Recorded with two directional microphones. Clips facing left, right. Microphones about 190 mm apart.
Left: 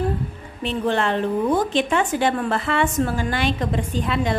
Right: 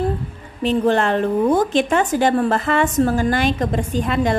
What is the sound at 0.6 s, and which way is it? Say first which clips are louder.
A woman's voice: right 5 dB; 40° right (ahead or behind).